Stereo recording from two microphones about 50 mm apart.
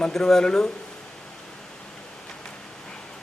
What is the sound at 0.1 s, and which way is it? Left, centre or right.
Speech, centre.